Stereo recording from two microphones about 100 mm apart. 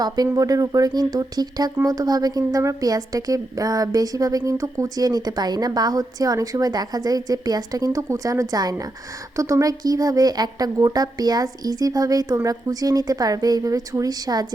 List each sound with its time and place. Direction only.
0.3 s speech: 35° right (ahead or behind)